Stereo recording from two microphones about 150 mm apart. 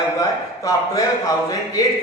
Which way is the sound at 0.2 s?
25° left (ahead or behind).